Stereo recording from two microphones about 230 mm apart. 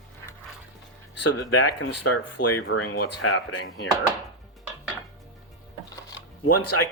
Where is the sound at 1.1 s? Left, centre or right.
Left.